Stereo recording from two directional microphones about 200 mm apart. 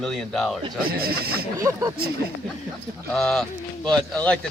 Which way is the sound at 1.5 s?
15° right (ahead or behind).